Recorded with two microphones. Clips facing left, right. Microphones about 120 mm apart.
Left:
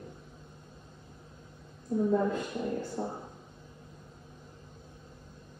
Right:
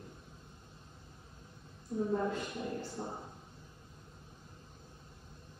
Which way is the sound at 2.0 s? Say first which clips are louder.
Left 6 dB; 55° left (ahead or behind).